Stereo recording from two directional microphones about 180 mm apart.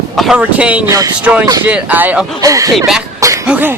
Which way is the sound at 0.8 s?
20° right (ahead or behind).